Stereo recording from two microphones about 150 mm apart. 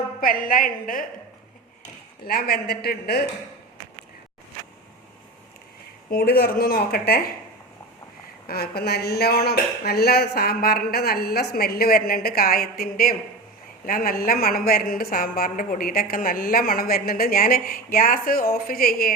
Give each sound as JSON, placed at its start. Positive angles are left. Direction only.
{"t": 0.2, "sound": "a woman's voice", "side_deg": 70}
{"t": 2.2, "sound": "speech", "side_deg": 90}
{"t": 6.1, "sound": "speech", "side_deg": 90}
{"t": 8.4, "sound": "speech", "side_deg": 90}
{"t": 13.8, "sound": "a woman's voice", "side_deg": 70}